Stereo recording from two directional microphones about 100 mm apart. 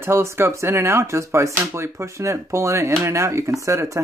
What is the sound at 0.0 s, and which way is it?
Speech, 25° right (ahead or behind).